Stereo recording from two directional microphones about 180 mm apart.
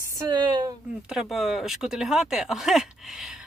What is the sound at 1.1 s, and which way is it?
Speech, centre (ahead or behind).